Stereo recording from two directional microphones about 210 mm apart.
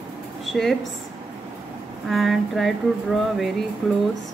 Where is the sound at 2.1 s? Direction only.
Centre (ahead or behind).